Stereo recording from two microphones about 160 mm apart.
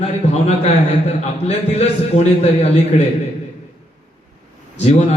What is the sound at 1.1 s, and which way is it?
A man's voice, 40° left (ahead or behind).